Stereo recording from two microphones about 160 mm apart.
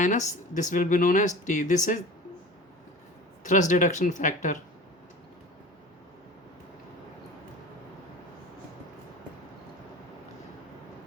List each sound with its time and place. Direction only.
0.0 s speech: 50° left (ahead or behind)
3.4 s speech: 50° left (ahead or behind)